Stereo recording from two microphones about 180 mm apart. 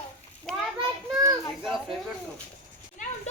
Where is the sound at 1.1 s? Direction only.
20° right (ahead or behind).